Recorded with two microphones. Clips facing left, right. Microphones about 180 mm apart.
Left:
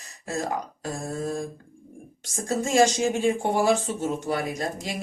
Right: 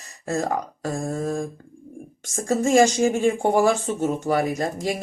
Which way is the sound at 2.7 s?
45° right (ahead or behind).